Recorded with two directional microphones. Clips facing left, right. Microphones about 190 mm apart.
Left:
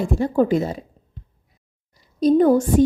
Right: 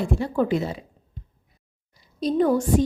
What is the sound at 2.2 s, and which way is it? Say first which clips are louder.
Speech: left 6 dB; 45° left (ahead or behind).